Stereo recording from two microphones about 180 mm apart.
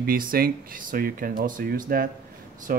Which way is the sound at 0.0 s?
55° right (ahead or behind).